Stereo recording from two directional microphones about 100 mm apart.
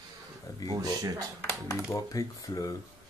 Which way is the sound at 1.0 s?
35° right (ahead or behind).